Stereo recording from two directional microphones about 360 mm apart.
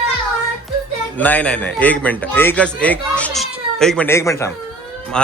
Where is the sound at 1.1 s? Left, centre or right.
Centre.